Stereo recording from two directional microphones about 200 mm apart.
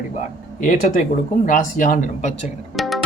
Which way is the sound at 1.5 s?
40° left (ahead or behind).